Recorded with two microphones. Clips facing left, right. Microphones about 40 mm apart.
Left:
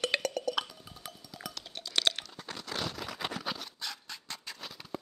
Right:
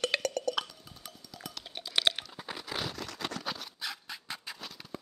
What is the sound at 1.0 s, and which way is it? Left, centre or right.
Music, centre.